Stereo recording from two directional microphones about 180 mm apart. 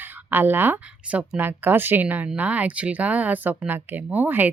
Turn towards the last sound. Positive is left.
turn(degrees=-10)  # may be behind; listen again after turning